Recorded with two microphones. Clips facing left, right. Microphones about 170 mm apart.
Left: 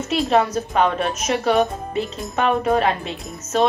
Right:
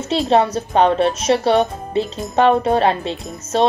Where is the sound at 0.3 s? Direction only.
30° right (ahead or behind).